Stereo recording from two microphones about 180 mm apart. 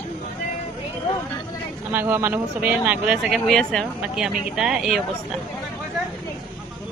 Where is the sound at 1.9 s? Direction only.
10° right (ahead or behind).